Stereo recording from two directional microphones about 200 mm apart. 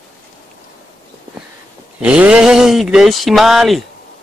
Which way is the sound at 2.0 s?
5° right (ahead or behind).